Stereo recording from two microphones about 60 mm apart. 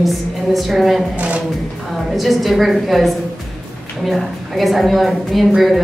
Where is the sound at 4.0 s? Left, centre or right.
Centre.